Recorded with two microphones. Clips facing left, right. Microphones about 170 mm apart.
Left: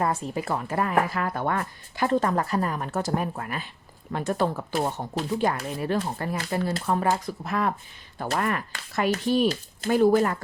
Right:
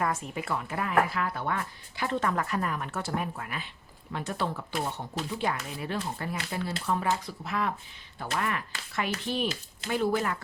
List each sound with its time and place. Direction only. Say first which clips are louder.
0.0 s speech: left 4 dB; 35° left (ahead or behind)